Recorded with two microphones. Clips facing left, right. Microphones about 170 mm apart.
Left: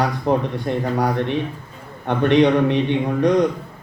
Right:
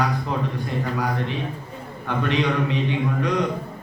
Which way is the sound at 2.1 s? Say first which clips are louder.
Left 8 dB; 65° left (ahead or behind).